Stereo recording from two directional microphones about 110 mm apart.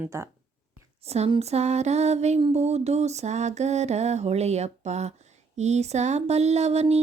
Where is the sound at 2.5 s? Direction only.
80° right.